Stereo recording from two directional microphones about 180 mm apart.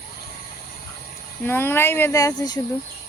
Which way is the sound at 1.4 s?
10° left (ahead or behind).